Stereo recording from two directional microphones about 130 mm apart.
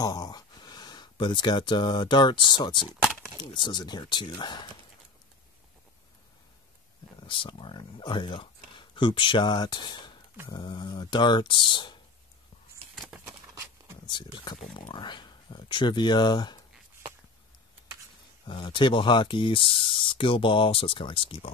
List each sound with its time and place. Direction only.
0.0 s speech: 30° left (ahead or behind)
3.0 s a sound: centre (ahead or behind)
3.3 s speech: 35° left (ahead or behind)
7.2 s speech: 40° left (ahead or behind)
13.2 s horse: 20° right (ahead or behind)
14.0 s speech: 35° left (ahead or behind)
18.5 s speech: 40° left (ahead or behind)